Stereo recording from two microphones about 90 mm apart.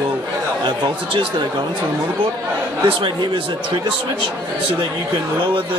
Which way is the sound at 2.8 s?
70° right (ahead or behind).